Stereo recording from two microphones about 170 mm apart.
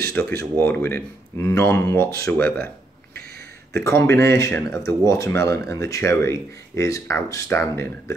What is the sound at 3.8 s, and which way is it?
Speech, 15° left (ahead or behind).